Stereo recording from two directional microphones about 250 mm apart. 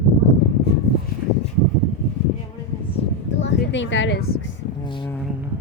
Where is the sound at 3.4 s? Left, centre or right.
Left.